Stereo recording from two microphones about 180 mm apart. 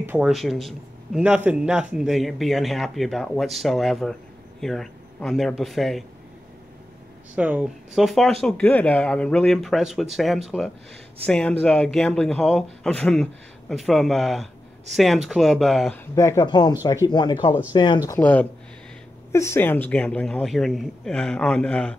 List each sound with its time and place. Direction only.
0.0 s speech: 10° right (ahead or behind)
0.3 s speech: centre (ahead or behind)
7.3 s speech: 5° right (ahead or behind)
16.2 s speech: 15° left (ahead or behind)
18.2 s speech: 10° left (ahead or behind)